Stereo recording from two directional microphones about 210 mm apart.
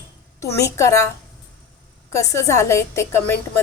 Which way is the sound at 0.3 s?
15° left (ahead or behind).